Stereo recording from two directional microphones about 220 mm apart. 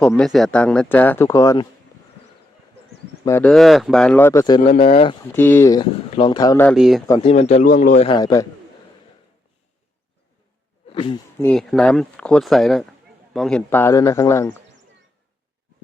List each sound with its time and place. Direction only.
0.0 s speech: centre (ahead or behind)
3.2 s a man's voice: 10° left (ahead or behind); by 5.1 s 25° left (ahead or behind)
5.4 s speech: 10° left (ahead or behind)
6.7 s speech: centre (ahead or behind)
7.1 s a man's voice: 25° left (ahead or behind)
10.9 s speech: 25° left (ahead or behind)
11.3 s speech: 5° left (ahead or behind)